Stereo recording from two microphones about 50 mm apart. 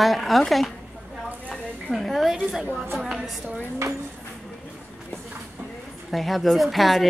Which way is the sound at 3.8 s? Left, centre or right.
Right.